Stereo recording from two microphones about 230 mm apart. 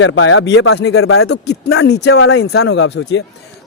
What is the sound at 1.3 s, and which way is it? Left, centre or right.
Speech, left.